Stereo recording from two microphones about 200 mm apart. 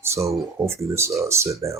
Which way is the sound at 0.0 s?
15° right (ahead or behind).